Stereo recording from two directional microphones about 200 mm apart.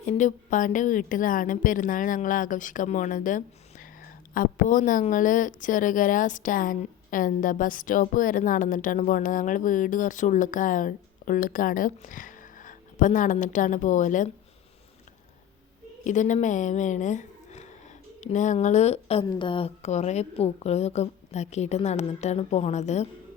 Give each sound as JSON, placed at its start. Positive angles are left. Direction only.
{"t": 0.0, "sound": "a woman's voice", "side_deg": 35}
{"t": 16.0, "sound": "a woman's voice", "side_deg": 40}